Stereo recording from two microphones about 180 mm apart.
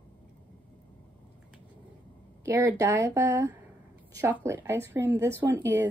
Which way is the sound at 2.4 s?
15° right (ahead or behind).